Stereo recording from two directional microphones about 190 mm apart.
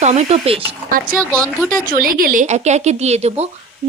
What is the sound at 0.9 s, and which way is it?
Speech, 50° right (ahead or behind).